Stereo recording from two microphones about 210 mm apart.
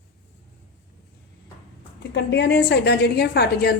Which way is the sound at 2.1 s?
55° left (ahead or behind).